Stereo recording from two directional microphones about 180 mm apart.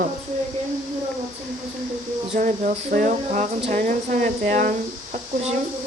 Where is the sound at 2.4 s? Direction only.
45° right (ahead or behind).